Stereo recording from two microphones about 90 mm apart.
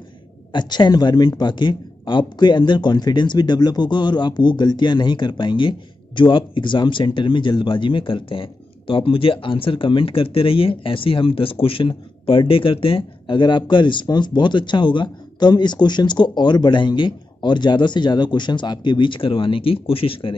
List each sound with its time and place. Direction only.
0.5 s speech: 55° left (ahead or behind); by 20.3 s 85° left